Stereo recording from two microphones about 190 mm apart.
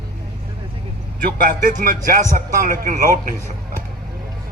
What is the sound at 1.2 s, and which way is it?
Speech, 50° right (ahead or behind).